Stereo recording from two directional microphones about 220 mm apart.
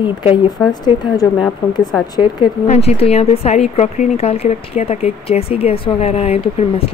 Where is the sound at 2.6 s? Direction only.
30° left (ahead or behind).